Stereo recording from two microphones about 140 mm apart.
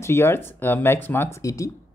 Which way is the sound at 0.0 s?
20° left (ahead or behind).